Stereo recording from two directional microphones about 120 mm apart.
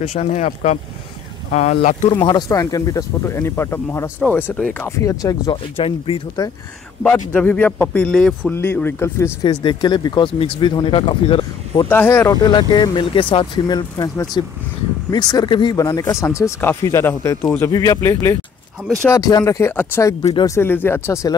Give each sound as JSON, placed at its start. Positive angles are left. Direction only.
{"t": 0.0, "sound": "speech", "side_deg": 60}
{"t": 2.0, "sound": "speech", "side_deg": 40}
{"t": 3.3, "sound": "speech", "side_deg": 20}
{"t": 5.8, "sound": "speech", "side_deg": 50}
{"t": 7.0, "sound": "a man's voice", "side_deg": 15}
{"t": 8.5, "sound": "speech", "side_deg": 15}
{"t": 9.4, "sound": "speech", "side_deg": 40}
{"t": 11.9, "sound": "speech", "side_deg": 20}